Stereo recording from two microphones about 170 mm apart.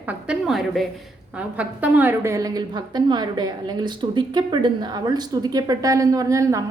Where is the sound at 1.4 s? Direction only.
10° right (ahead or behind).